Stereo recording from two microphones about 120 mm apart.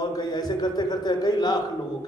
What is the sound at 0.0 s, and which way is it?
A man's voice, 35° left (ahead or behind).